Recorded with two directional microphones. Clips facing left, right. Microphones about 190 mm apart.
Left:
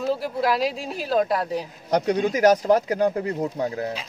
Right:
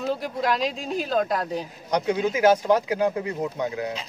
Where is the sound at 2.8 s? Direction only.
45° left (ahead or behind).